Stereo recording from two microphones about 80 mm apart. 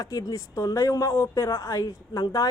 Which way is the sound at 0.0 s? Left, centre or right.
Left.